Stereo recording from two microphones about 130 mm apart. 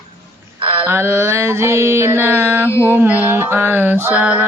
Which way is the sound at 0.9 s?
20° right (ahead or behind).